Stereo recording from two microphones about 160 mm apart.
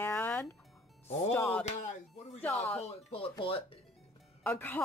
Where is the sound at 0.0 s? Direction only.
10° left (ahead or behind).